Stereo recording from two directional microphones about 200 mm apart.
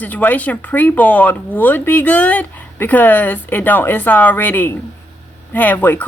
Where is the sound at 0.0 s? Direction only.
10° left (ahead or behind).